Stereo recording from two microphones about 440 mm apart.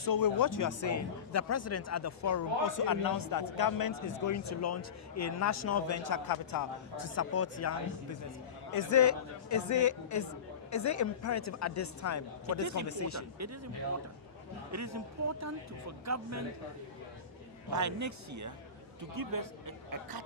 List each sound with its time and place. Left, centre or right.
0.0 s speech: left
6.9 s speech: left
14.7 s speech: right
17.7 s speech: right